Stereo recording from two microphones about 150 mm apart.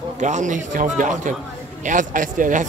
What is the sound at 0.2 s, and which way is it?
Speech, 55° right (ahead or behind).